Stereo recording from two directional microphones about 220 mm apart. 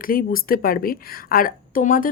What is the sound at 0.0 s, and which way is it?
A woman's voice, 40° left (ahead or behind).